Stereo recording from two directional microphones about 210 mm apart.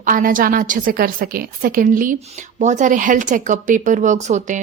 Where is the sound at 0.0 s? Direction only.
40° right (ahead or behind).